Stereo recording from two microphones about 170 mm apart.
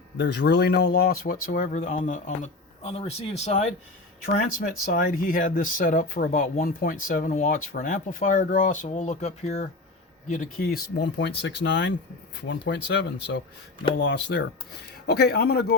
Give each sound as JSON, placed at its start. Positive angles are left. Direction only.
{"t": 0.2, "sound": "speech", "side_deg": 80}
{"t": 4.6, "sound": "speech", "side_deg": 55}
{"t": 15.0, "sound": "a man's voice", "side_deg": 70}